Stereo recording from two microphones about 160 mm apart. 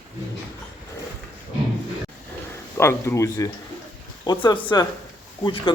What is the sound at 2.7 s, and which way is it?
Speech, 15° left (ahead or behind).